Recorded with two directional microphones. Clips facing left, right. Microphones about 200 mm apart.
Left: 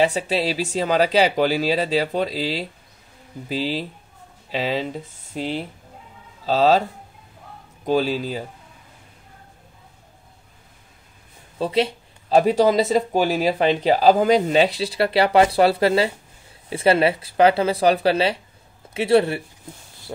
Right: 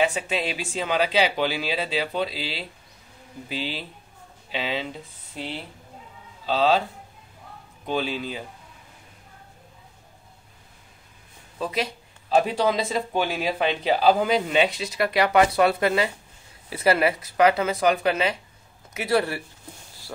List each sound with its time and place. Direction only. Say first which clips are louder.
0.0 s speech: left 4 dB; 35° left (ahead or behind)
6.4 s speech: left 4 dB; 40° left (ahead or behind)
7.8 s speech: left 6 dB; 40° left (ahead or behind)
11.5 s speech: left 7 dB; 30° left (ahead or behind)